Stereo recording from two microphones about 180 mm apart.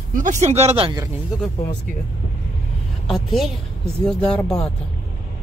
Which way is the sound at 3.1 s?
Centre (ahead or behind).